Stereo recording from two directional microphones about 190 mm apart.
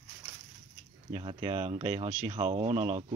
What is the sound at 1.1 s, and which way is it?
Speech, 30° right (ahead or behind).